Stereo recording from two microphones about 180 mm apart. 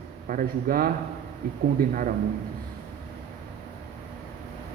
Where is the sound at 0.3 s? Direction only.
50° right (ahead or behind).